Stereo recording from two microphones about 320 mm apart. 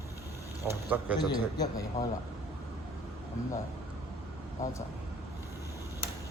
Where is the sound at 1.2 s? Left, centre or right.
Centre.